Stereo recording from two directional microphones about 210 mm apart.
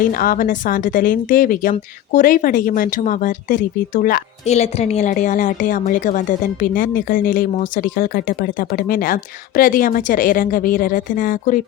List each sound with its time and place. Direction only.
0.1 s speech: 40° left (ahead or behind)